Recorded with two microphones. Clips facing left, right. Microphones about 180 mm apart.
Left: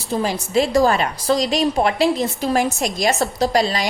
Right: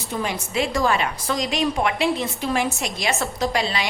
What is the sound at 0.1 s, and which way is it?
A woman's voice, 35° left (ahead or behind).